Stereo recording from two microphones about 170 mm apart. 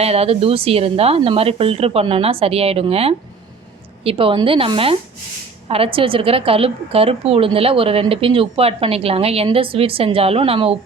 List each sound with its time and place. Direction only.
0.0 s a woman's voice: 35° right (ahead or behind)